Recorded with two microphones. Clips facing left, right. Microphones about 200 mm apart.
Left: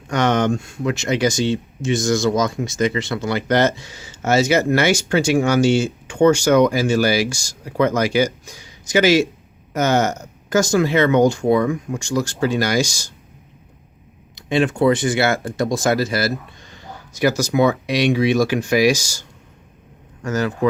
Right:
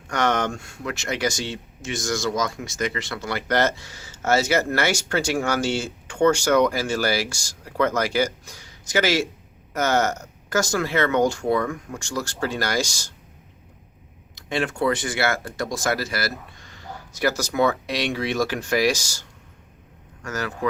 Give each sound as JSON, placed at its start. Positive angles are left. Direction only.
{"t": 0.1, "sound": "speech", "side_deg": 20}
{"t": 14.3, "sound": "speech", "side_deg": 20}
{"t": 20.2, "sound": "speech", "side_deg": 20}